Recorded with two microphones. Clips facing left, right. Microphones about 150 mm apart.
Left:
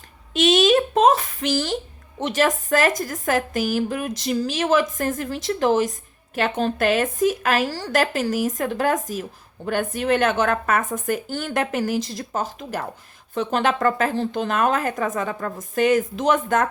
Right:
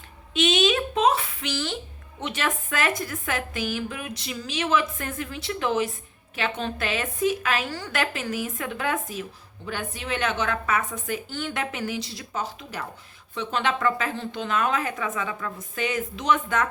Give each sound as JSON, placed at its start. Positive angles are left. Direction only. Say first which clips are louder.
{"t": 0.3, "sound": "a woman's voice", "louder": "left 6 dB", "side_deg": 45}